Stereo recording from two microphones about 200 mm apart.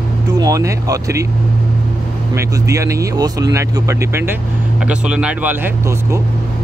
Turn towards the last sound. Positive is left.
turn(degrees=-10)  # may be behind; listen again after turning